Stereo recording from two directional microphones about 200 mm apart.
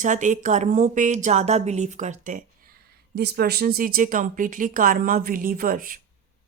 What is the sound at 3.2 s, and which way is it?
Speech, 55° right (ahead or behind).